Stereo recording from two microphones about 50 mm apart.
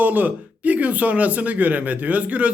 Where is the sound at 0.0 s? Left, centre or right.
Right.